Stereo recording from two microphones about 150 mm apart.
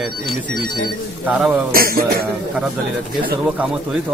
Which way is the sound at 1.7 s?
80° right.